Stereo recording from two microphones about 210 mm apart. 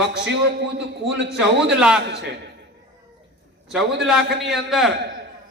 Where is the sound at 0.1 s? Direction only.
55° right (ahead or behind).